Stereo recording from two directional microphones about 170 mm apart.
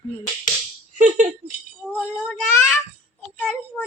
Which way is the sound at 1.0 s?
50° right (ahead or behind).